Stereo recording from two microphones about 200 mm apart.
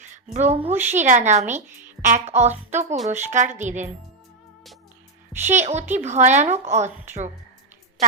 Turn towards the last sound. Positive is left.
turn(degrees=-35)  # may be behind; listen again after turning